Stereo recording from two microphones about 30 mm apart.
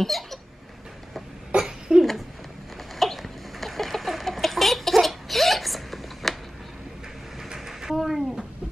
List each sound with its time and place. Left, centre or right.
0.0 s hiccup: centre
1.5 s cough: right
1.9 s babbling: right
3.0 s chicken: centre
7.5 s a sound: centre
7.9 s a sound: centre